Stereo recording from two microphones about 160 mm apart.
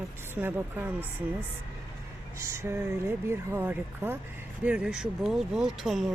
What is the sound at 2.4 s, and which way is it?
Speech, 15° right (ahead or behind).